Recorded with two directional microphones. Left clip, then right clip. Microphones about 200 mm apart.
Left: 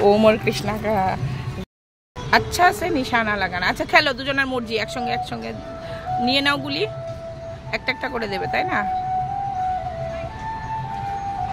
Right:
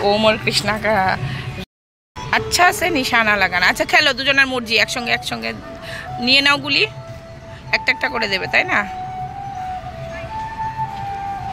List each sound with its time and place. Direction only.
0.1 s speech: 35° left (ahead or behind)
0.5 s speech: 15° left (ahead or behind)
2.3 s a woman's voice: centre (ahead or behind)